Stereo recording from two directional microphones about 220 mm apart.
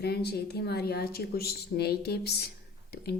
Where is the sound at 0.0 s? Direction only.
45° left (ahead or behind).